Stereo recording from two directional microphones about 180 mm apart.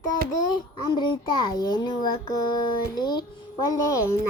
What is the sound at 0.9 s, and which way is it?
Child singing, 25° left (ahead or behind).